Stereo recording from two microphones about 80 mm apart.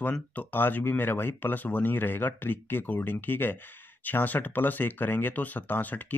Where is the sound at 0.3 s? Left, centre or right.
Left.